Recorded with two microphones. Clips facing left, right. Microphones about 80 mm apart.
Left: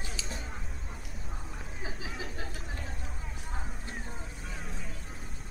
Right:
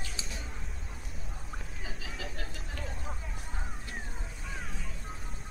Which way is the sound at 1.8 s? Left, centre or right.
Left.